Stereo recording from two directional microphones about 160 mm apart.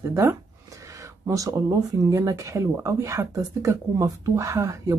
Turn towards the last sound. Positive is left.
turn(degrees=-20)  # may be behind; listen again after turning